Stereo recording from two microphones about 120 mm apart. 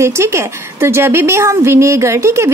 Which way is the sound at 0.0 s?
20° right (ahead or behind).